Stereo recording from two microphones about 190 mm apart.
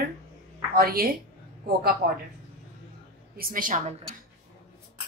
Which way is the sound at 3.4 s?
45° right (ahead or behind).